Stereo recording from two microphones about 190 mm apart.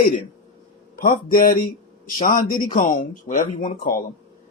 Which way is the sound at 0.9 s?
45° left (ahead or behind).